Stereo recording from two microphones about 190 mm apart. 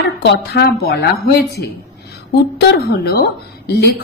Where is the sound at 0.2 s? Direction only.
65° left (ahead or behind).